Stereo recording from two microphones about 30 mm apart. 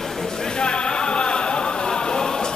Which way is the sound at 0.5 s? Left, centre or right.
Left.